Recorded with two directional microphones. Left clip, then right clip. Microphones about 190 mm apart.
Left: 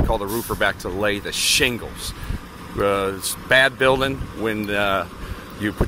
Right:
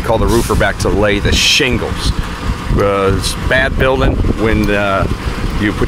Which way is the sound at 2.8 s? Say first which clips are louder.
Right 7 dB; 5° left (ahead or behind).